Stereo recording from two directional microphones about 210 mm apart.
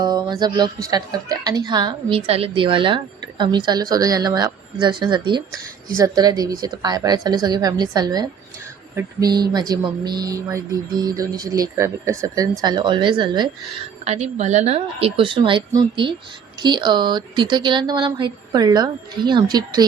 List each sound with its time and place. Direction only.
0.0 s a woman's voice: 20° right (ahead or behind)
14.0 s a woman's voice: 30° right (ahead or behind)